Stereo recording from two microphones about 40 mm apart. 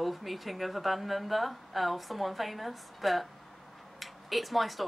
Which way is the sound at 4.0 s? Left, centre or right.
Centre.